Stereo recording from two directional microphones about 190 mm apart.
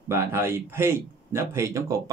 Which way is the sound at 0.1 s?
15° right (ahead or behind).